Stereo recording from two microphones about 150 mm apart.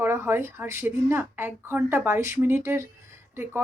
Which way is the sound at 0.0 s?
15° right (ahead or behind).